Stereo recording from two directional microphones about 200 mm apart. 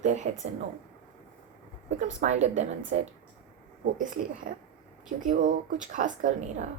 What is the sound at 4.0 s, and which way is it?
Speech, 40° right (ahead or behind).